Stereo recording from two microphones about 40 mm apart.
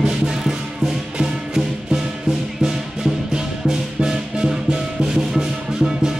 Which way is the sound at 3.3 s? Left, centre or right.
Centre.